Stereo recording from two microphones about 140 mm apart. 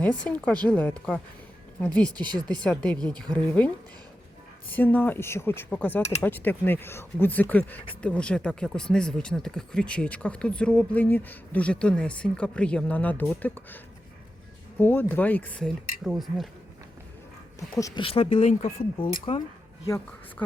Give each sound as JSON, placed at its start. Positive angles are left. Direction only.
{"t": 0.3, "sound": "speech", "side_deg": 10}
{"t": 4.7, "sound": "speech", "side_deg": 10}
{"t": 16.0, "sound": "speech", "side_deg": 0}
{"t": 17.7, "sound": "speech", "side_deg": 25}
{"t": 18.0, "sound": "speech", "side_deg": 40}